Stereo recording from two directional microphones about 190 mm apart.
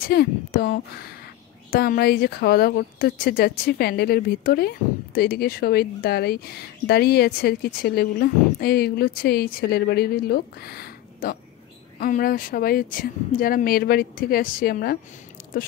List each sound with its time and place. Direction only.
0.0 s speech: 55° left (ahead or behind)